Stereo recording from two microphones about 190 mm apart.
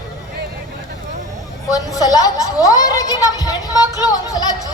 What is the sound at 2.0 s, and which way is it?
A woman's voice, 20° left (ahead or behind).